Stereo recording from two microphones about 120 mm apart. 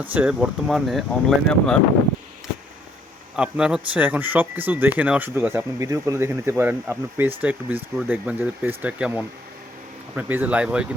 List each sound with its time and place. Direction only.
0.0 s speech: 15° right (ahead or behind); by 1.8 s 5° left (ahead or behind)
3.3 s speech: 10° right (ahead or behind)